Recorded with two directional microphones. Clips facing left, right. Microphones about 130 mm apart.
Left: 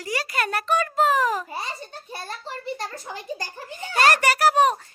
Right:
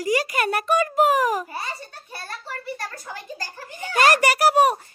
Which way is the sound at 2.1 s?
20° left (ahead or behind).